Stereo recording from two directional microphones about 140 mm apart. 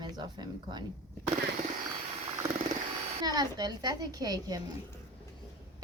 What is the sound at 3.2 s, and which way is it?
A woman's voice, 25° right (ahead or behind).